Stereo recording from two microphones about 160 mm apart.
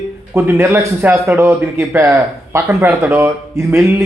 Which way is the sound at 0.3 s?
15° right (ahead or behind).